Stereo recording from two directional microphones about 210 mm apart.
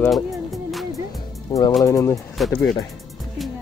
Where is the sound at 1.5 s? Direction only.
15° left (ahead or behind).